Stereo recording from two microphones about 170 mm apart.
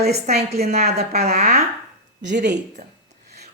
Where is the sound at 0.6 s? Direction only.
40° right (ahead or behind).